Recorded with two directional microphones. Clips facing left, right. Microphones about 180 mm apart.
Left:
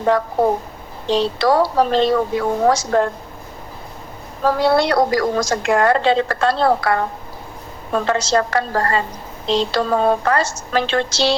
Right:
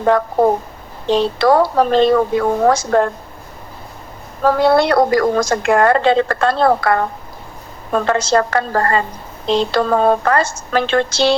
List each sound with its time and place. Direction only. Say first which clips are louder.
1.0 s a woman's voice: right 3 dB; 50° right (ahead or behind)
4.4 s a woman's voice: right 3 dB; 55° right (ahead or behind)